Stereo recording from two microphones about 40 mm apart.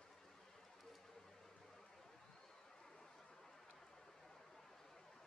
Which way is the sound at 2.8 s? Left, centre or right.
Centre.